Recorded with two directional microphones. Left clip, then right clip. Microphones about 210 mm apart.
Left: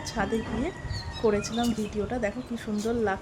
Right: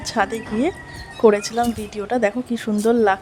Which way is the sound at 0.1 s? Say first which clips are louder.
Right 8 dB; 40° right (ahead or behind).